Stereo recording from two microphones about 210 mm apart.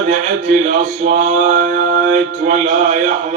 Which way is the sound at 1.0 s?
35° right (ahead or behind).